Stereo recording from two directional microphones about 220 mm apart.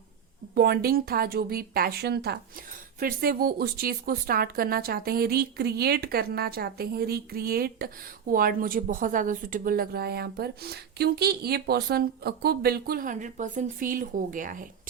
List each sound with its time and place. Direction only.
0.5 s a woman's voice: 45° right (ahead or behind)